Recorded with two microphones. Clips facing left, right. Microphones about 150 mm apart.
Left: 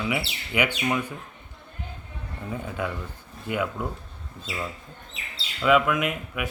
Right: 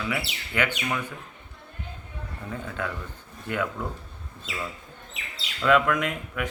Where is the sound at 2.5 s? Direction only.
10° left (ahead or behind).